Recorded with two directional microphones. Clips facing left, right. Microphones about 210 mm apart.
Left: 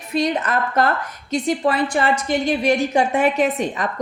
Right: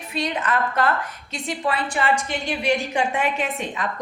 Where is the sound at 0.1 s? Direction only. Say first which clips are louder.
Left 5 dB; 40° left (ahead or behind).